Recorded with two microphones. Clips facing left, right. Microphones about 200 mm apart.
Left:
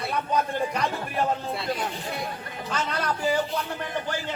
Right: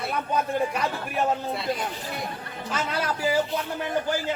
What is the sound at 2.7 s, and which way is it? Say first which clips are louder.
Speech: even; 5° right (ahead or behind).